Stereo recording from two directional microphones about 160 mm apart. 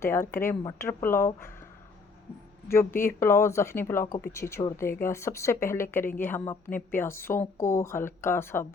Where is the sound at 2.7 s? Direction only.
15° left (ahead or behind).